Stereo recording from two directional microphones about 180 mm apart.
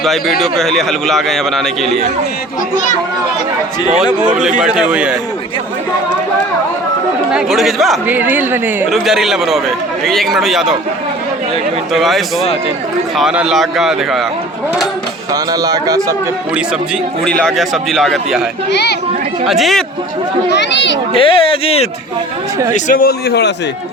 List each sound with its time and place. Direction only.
0.0 s a man's voice: centre (ahead or behind)
4.4 s a man's voice: 5° right (ahead or behind)
7.3 s a man's voice: centre (ahead or behind)
8.0 s a woman's voice: 10° right (ahead or behind)
11.9 s a man's voice: centre (ahead or behind)
15.3 s a man's voice: 20° right (ahead or behind)
17.2 s a man's voice: 5° left (ahead or behind)
18.7 s speech: 65° left (ahead or behind)
19.5 s a man's voice: centre (ahead or behind)
20.5 s speech: 75° left (ahead or behind)
21.2 s speech: 30° left (ahead or behind)
22.7 s a man's voice: 50° left (ahead or behind)